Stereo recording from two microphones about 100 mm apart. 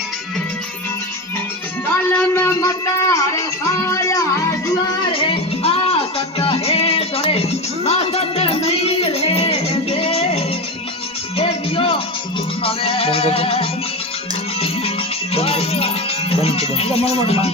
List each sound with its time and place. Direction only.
2.0 s music: 25° left (ahead or behind)
5.0 s music: 65° left (ahead or behind); by 15.9 s 85° left
16.3 s speech: 90° left